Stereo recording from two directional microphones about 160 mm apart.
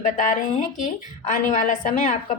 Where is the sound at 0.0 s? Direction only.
50° left (ahead or behind).